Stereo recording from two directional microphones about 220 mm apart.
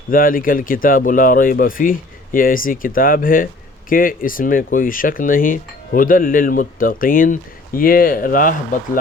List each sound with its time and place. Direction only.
0.1 s speech: 40° left (ahead or behind)